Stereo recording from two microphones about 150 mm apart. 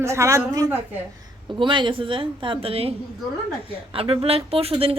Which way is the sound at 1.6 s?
35° right (ahead or behind).